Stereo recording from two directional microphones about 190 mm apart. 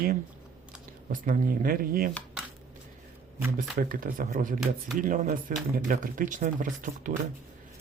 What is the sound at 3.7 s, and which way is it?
Speech, 45° right (ahead or behind).